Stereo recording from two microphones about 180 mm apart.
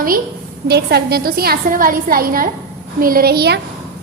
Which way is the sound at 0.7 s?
65° right (ahead or behind).